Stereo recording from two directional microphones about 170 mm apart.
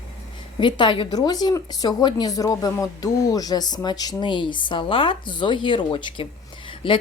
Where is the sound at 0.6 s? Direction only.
25° left (ahead or behind).